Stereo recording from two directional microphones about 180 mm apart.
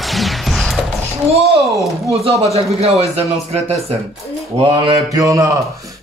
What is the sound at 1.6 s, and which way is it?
Speech, centre (ahead or behind).